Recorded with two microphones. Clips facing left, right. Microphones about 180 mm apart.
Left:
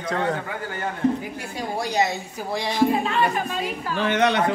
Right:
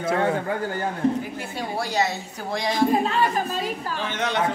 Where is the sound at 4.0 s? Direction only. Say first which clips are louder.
Left 10 dB; 65° left (ahead or behind).